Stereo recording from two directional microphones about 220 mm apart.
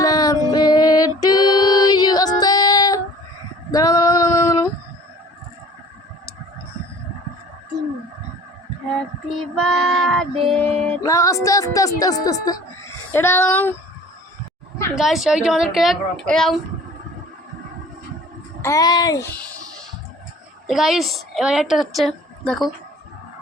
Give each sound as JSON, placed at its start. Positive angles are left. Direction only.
{"t": 0.0, "sound": "music", "side_deg": 15}
{"t": 3.7, "sound": "female singing", "side_deg": 15}
{"t": 9.6, "sound": "music", "side_deg": 0}
{"t": 14.9, "sound": "a woman's voice", "side_deg": 0}
{"t": 18.6, "sound": "a child's voice", "side_deg": 15}
{"t": 20.7, "sound": "a woman's voice", "side_deg": 0}